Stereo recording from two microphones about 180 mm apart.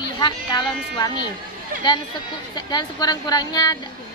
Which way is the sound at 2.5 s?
20° left (ahead or behind).